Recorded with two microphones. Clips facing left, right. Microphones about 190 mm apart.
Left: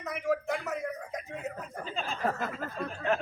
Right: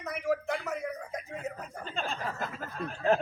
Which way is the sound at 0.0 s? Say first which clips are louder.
Even; centre (ahead or behind).